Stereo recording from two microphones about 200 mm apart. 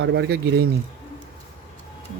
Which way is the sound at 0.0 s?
60° right (ahead or behind).